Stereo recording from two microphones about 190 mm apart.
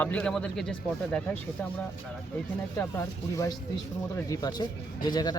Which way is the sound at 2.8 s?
15° left (ahead or behind).